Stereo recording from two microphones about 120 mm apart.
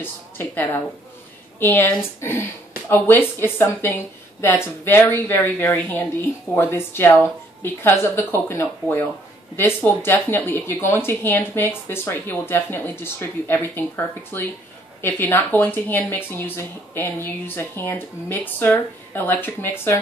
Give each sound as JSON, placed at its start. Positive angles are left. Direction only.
{"t": 0.0, "sound": "a woman's voice", "side_deg": 15}